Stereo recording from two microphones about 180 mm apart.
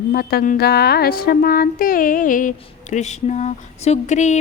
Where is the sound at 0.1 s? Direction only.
60° left (ahead or behind).